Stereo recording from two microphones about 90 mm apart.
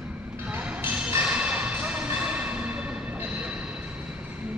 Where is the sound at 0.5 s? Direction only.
20° right (ahead or behind).